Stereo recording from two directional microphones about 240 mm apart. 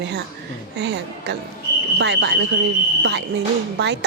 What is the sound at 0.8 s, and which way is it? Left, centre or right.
A woman's voice, right.